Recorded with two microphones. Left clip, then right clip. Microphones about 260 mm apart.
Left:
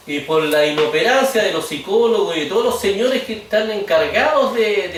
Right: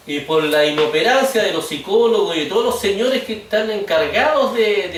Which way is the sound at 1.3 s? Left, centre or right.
Centre.